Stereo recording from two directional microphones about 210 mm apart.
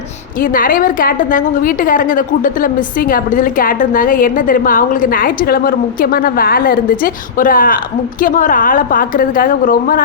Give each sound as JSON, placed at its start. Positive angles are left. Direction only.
{"t": 0.3, "sound": "a woman's voice", "side_deg": 40}